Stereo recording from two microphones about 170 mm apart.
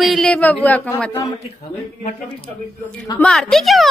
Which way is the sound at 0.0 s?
Centre (ahead or behind).